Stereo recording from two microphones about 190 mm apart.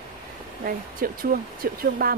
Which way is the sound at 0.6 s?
50° right (ahead or behind).